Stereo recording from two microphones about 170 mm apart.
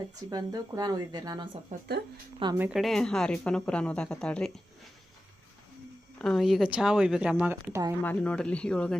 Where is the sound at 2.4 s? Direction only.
30° right (ahead or behind).